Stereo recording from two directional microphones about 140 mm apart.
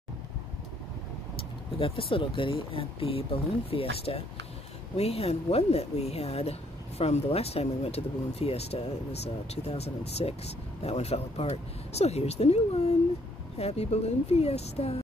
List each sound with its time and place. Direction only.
1.8 s speech: 40° left (ahead or behind)
13.6 s speech: 45° left (ahead or behind)